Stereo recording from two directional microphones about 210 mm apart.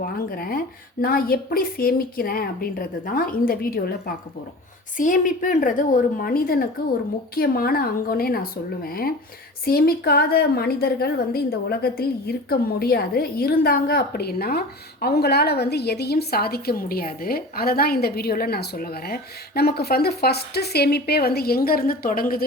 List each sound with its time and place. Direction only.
0.0 s a woman's voice: 45° left (ahead or behind)